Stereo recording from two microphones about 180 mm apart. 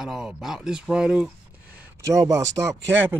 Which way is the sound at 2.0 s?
15° right (ahead or behind).